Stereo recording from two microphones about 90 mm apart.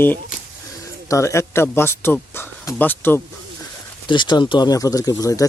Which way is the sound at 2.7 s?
20° left (ahead or behind).